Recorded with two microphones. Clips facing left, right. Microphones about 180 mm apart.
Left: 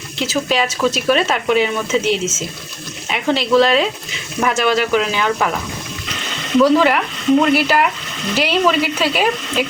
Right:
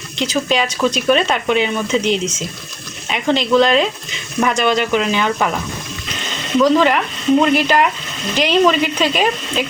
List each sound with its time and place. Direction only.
0.2 s speech: 5° left (ahead or behind)
6.6 s speech: 5° left (ahead or behind)